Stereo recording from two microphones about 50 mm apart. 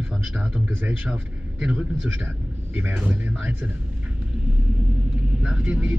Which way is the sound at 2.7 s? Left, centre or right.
Right.